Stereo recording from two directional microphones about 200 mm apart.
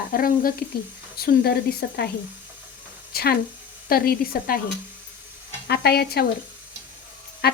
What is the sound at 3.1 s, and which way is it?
A woman's voice, 50° left (ahead or behind).